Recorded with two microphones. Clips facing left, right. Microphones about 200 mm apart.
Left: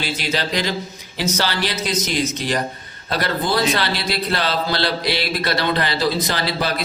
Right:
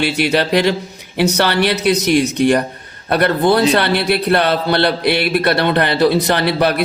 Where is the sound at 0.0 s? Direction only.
65° right (ahead or behind).